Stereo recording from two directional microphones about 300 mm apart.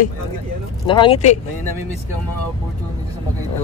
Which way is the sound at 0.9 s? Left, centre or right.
Centre.